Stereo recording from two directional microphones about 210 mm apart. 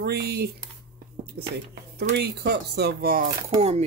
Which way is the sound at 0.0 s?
50° right (ahead or behind).